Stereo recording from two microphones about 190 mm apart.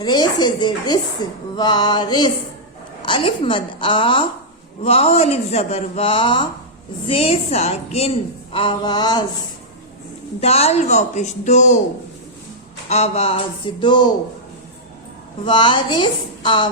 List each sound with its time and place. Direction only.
0.0 s a woman's voice: 25° left (ahead or behind)
10.4 s speech: 35° left (ahead or behind)
12.9 s a woman's voice: 35° left (ahead or behind)
15.4 s a woman's voice: 25° left (ahead or behind)